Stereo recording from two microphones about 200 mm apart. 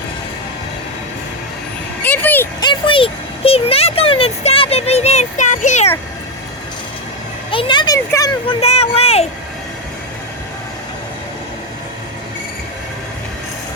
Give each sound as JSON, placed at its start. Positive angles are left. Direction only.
{"t": 2.0, "sound": "speech", "side_deg": 10}
{"t": 2.6, "sound": "speech", "side_deg": 25}
{"t": 7.5, "sound": "speech", "side_deg": 25}
{"t": 8.4, "sound": "speech", "side_deg": 30}